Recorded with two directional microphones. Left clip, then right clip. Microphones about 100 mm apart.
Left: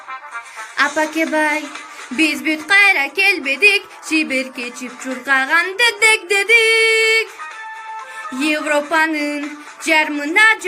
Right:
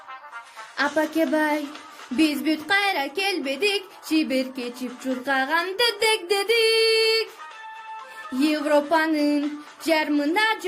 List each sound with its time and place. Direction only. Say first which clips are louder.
0.9 s speech: left 5 dB; 35° right (ahead or behind)
8.4 s speech: left 3 dB; 40° right (ahead or behind)